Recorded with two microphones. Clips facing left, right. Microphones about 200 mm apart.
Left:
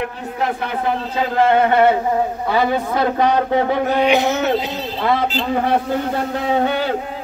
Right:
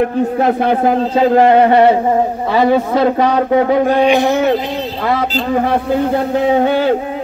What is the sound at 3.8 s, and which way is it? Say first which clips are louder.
Speech: right 4 dB; 10° right (ahead or behind).